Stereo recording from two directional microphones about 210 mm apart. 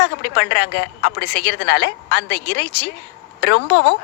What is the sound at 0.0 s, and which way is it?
A woman's voice, 55° left (ahead or behind).